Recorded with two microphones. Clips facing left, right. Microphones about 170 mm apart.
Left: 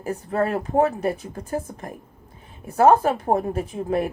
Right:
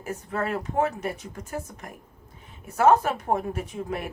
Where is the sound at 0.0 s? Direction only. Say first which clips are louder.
Left 6 dB; 35° left (ahead or behind).